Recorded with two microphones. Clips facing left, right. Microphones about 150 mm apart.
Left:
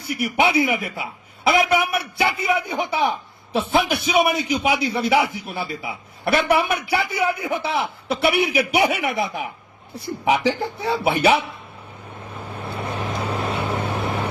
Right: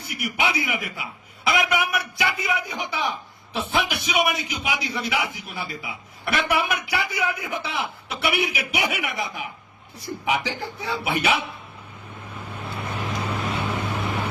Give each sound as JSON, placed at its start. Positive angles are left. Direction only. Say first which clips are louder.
{"t": 0.1, "sound": "a man's voice", "louder": "left 6 dB", "side_deg": 30}
{"t": 12.8, "sound": "vehicle", "louder": "left 3 dB", "side_deg": 30}